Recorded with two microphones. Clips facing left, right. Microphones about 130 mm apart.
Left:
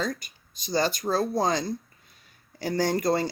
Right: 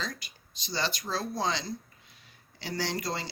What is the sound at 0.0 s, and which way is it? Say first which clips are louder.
Speech: left 8 dB; 50° left (ahead or behind).